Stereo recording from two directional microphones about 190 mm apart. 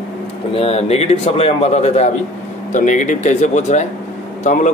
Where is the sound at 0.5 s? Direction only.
30° left (ahead or behind).